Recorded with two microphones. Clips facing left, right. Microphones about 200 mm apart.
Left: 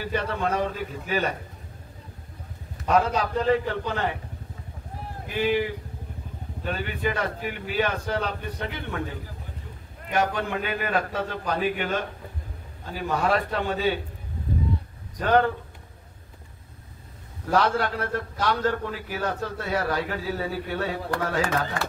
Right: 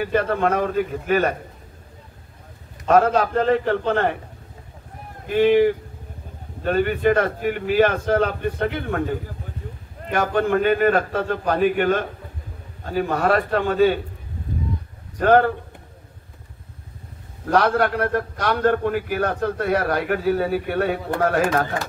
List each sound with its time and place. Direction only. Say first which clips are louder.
0.0 s a man's voice: right 7 dB; 55° right (ahead or behind)
2.9 s a man's voice: right 6 dB; 60° right (ahead or behind)
5.3 s a man's voice: right 9 dB; 55° right (ahead or behind)
15.1 s a man's voice: right 5 dB; 60° right (ahead or behind)
17.5 s a man's voice: right 5 dB; 60° right (ahead or behind)